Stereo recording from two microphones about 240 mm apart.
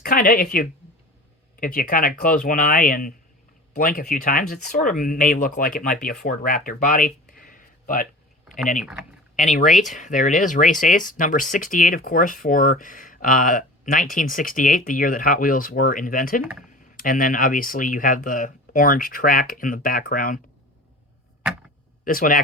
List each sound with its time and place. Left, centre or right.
0.0 s speech: left
8.8 s speech: centre
9.3 s speech: left
22.0 s speech: left